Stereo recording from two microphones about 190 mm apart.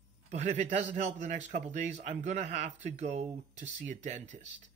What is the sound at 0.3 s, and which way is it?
Speech, 35° right (ahead or behind).